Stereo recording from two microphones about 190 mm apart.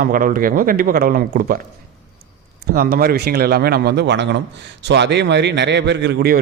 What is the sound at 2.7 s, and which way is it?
A man's voice, 50° right (ahead or behind).